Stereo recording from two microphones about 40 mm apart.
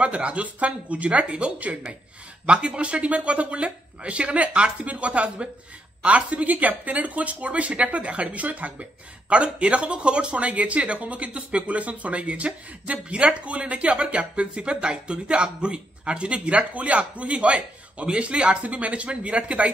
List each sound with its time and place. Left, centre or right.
0.0 s speech: right